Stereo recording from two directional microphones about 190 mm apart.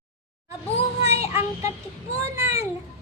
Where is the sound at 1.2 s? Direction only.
15° right (ahead or behind).